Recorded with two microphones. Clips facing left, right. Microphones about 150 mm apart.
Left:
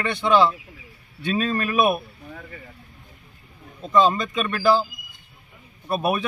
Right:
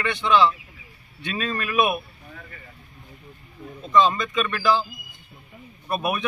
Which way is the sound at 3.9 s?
40° left (ahead or behind).